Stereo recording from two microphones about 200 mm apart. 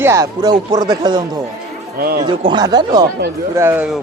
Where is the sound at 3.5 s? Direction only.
10° right (ahead or behind).